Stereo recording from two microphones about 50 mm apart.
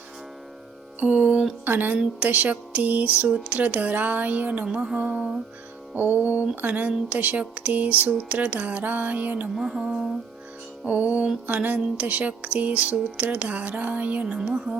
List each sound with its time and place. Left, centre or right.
0.9 s music: right
1.6 s speech: right
2.1 s speech: right
4.6 s music: centre
5.9 s speech: right
9.6 s music: centre
10.8 s speech: right
14.5 s speech: centre